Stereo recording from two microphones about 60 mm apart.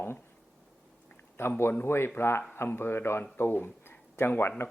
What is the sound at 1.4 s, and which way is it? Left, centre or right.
Speech, left.